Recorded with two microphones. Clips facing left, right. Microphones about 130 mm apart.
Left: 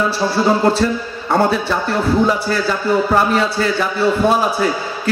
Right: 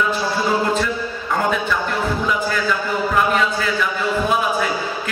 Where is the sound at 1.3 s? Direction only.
35° left (ahead or behind).